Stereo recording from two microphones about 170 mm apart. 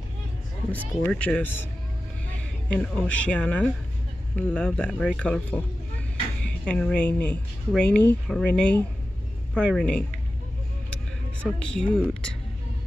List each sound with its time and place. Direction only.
0.7 s speech: 10° left (ahead or behind)
2.8 s speech: 5° left (ahead or behind)
6.6 s speech: 5° left (ahead or behind)
11.6 s speech: 5° left (ahead or behind)